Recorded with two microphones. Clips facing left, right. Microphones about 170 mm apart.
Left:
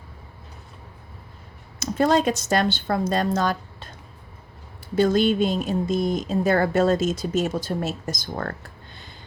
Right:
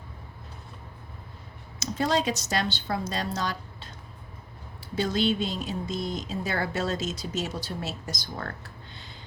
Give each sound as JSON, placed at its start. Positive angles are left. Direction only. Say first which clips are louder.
{"t": 1.8, "sound": "speech", "louder": "left 6 dB", "side_deg": 50}
{"t": 4.9, "sound": "speech", "louder": "left 7 dB", "side_deg": 50}